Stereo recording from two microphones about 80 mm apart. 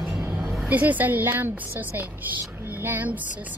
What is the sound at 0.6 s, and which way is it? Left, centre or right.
A woman's voice, right.